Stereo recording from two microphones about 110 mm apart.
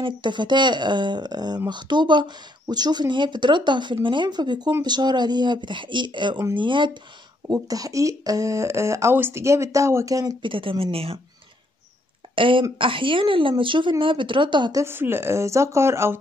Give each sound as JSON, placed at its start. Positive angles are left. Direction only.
{"t": 0.0, "sound": "speech", "side_deg": -45}
{"t": 7.4, "sound": "speech", "side_deg": -35}
{"t": 10.4, "sound": "speech", "side_deg": -50}
{"t": 12.4, "sound": "speech", "side_deg": -50}
{"t": 14.8, "sound": "speech", "side_deg": -20}